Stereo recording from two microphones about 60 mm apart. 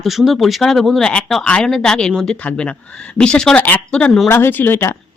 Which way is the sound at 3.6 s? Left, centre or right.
Left.